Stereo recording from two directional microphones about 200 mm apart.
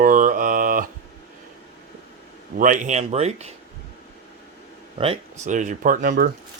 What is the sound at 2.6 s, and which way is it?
Mantra, 40° right (ahead or behind).